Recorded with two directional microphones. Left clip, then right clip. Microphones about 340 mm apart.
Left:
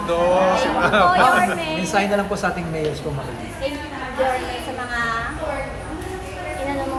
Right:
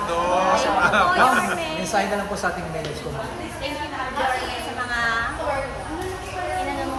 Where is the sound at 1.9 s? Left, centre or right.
Centre.